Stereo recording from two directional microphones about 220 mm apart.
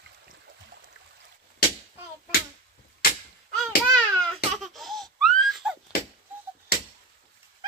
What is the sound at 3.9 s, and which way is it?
Baby cry, 5° left (ahead or behind).